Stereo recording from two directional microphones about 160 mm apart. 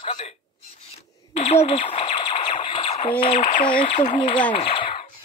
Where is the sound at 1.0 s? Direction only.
40° left (ahead or behind).